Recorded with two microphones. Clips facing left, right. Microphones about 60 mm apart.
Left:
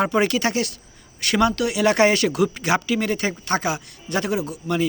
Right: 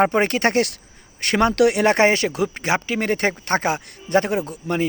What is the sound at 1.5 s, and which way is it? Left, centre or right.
Speech, right.